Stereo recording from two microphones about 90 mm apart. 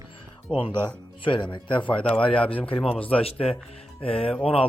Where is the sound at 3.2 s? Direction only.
90° left.